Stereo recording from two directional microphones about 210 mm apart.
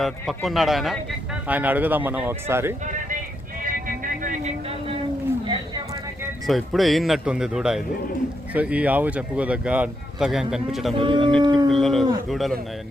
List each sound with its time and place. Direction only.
0.0 s a man's voice: centre (ahead or behind)
3.6 s music: 40° right (ahead or behind)
5.5 s a sound: 20° right (ahead or behind)
6.4 s a man's voice: centre (ahead or behind)
10.9 s dog: 25° right (ahead or behind)
11.7 s speech: centre (ahead or behind)